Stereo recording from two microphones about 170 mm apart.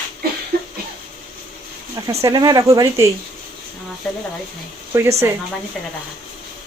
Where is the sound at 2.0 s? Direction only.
20° right (ahead or behind).